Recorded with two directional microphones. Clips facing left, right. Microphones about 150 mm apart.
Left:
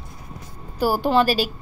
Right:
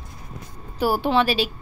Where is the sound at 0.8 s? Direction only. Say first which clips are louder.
Left 1 dB; 40° left (ahead or behind).